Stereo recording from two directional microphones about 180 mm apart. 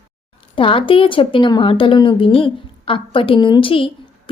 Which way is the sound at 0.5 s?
30° left (ahead or behind).